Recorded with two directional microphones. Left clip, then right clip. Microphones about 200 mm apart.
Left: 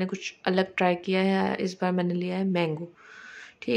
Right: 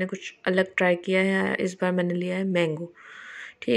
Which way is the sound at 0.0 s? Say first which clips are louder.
Right 1 dB; centre (ahead or behind).